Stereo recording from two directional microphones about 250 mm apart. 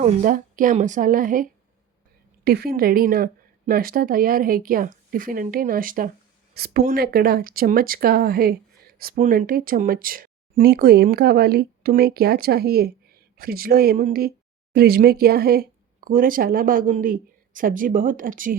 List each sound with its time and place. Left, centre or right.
0.0 s speech: right